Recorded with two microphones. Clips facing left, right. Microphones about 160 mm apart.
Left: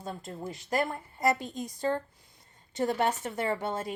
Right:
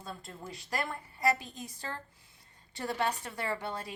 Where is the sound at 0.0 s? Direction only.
20° left (ahead or behind).